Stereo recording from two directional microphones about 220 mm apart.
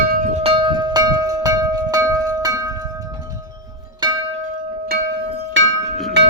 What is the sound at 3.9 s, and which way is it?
Music, 20° right (ahead or behind).